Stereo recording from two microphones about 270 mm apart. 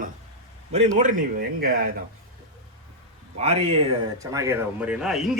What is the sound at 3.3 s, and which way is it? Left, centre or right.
Speech, right.